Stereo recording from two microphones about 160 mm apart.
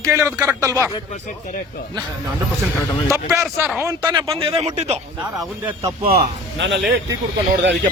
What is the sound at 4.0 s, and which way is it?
Speech, 30° right (ahead or behind).